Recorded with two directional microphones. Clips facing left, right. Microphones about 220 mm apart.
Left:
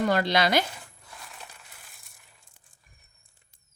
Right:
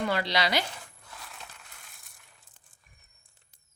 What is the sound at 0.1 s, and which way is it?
Speech, 50° left (ahead or behind).